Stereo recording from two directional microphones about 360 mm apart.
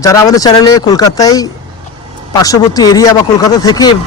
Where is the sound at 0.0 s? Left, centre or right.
Centre.